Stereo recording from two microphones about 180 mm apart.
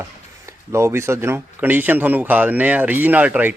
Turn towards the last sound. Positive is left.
turn(degrees=-10)  # may be behind; listen again after turning